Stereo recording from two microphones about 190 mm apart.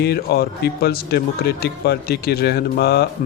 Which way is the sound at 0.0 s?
55° left (ahead or behind).